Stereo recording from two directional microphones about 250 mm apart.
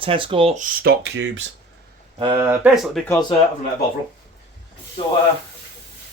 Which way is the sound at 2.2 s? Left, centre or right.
Centre.